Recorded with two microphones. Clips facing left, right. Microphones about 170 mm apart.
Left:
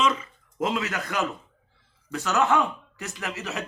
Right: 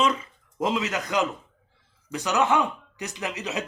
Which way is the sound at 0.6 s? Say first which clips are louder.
Right 1 dB; 20° right (ahead or behind).